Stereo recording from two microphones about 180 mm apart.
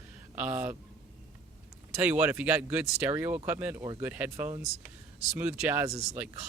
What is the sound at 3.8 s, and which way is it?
Speech, 20° right (ahead or behind).